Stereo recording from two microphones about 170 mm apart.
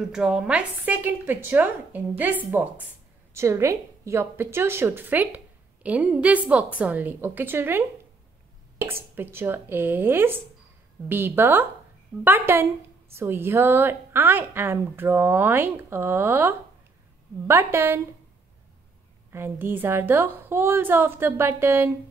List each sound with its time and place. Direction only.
0.1 s a woman's voice: 5° right (ahead or behind)
19.3 s a woman's voice: 15° right (ahead or behind)